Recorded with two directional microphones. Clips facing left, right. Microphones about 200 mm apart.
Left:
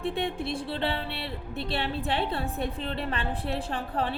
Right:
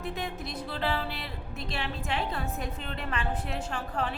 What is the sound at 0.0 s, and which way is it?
Music, 30° left (ahead or behind).